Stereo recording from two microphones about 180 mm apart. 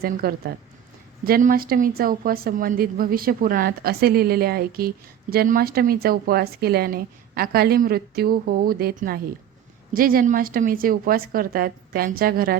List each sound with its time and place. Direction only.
0.0 s a woman's voice: 55° right (ahead or behind)